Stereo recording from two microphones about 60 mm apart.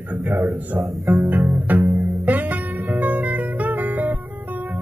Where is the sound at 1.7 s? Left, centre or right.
Right.